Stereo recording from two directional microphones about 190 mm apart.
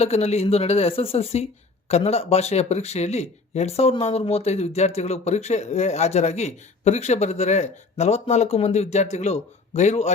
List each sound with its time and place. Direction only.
0.0 s speech: 35° left (ahead or behind)